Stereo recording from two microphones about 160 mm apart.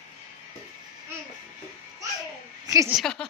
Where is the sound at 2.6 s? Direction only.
20° right (ahead or behind).